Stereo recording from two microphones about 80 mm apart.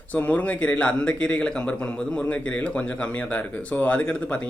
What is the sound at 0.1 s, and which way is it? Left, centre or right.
A man's voice, centre.